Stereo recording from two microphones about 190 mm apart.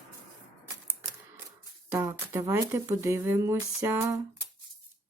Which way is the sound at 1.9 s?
15° right (ahead or behind).